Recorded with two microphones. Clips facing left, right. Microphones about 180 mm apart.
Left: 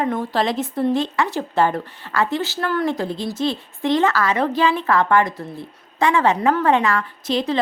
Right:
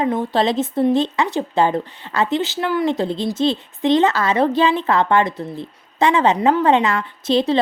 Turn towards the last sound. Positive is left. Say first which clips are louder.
# right 4 dB
turn(degrees=-30)  # may be behind; listen again after turning